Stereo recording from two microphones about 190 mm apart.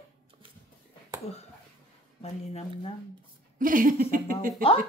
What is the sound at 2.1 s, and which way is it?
Speech, 35° left (ahead or behind).